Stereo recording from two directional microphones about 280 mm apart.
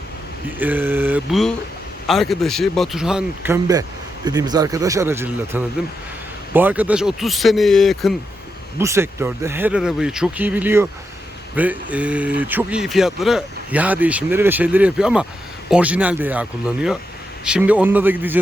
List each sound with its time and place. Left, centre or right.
0.6 s speech: centre
8.8 s speech: centre